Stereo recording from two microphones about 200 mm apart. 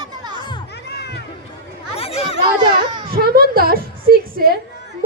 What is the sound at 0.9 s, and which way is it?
Run, 55° left (ahead or behind).